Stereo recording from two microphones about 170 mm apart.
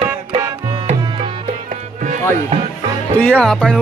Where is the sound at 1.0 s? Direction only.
30° right (ahead or behind).